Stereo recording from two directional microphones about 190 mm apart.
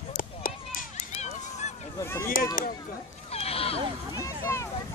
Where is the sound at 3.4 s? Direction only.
30° left (ahead or behind).